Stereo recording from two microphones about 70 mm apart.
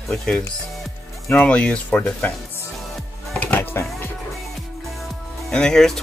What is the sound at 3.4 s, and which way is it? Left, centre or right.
Music, left.